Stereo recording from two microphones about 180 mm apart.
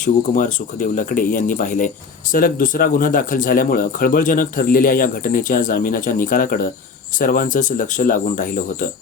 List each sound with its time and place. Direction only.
0.0 s speech: 45° left (ahead or behind)